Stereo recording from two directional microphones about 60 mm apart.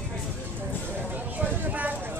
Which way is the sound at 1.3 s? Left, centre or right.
Right.